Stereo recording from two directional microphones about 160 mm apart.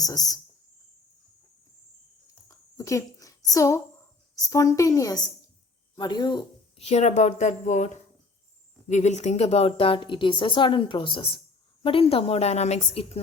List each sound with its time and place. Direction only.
0.0 s a woman's voice: 20° left (ahead or behind)
2.5 s a sound: 20° left (ahead or behind)
4.4 s a woman's voice: 20° left (ahead or behind)
6.7 s speech: 45° left (ahead or behind)
8.9 s speech: 45° left (ahead or behind)